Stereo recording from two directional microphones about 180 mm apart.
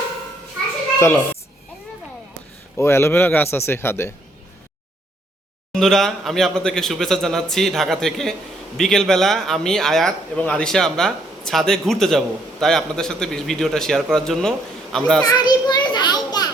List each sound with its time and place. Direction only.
0.9 s a child's voice: 15° left (ahead or behind)
2.7 s a man's voice: 15° left (ahead or behind)
5.7 s a man's voice: centre (ahead or behind)
15.2 s children playing: 20° left (ahead or behind)